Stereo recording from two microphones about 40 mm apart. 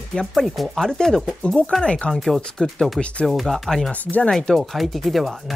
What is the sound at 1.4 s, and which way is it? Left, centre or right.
Speech, left.